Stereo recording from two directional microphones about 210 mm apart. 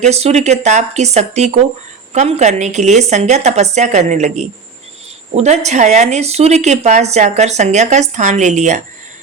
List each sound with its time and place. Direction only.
0.0 s speech: 30° right (ahead or behind)